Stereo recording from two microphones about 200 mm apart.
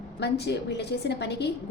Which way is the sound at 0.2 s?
55° left (ahead or behind).